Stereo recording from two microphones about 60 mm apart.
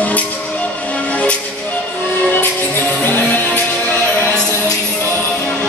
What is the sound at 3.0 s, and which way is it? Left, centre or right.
Music, left.